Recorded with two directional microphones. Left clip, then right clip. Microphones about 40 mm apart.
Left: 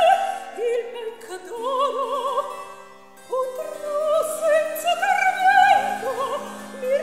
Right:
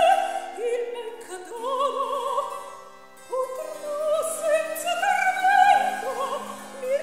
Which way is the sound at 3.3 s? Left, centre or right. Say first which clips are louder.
Left 3 dB; right.